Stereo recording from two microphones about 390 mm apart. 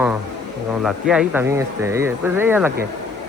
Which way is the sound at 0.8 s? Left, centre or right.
Centre.